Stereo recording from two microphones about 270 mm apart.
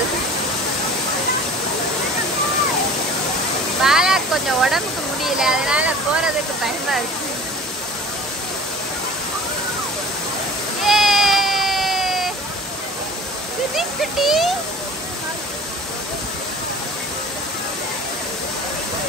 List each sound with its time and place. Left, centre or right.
3.8 s speech: centre
10.8 s a sound: centre
13.7 s speech: centre